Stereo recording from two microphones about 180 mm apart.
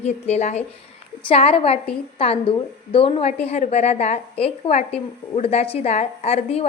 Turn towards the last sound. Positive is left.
turn(degrees=35)  # may be behind; listen again after turning